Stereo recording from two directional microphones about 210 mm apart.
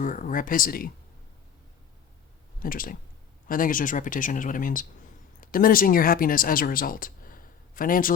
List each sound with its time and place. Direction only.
0.0 s speech: 40° left (ahead or behind)
2.6 s speech: 40° left (ahead or behind)